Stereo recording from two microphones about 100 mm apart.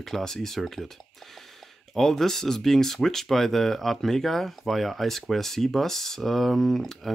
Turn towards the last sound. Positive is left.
turn(degrees=0)  # may be behind; listen again after turning